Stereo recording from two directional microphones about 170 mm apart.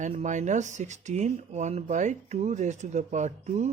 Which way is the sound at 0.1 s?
45° right (ahead or behind).